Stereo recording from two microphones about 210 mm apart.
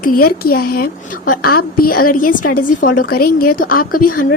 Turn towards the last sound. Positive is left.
turn(degrees=40)  # may be behind; listen again after turning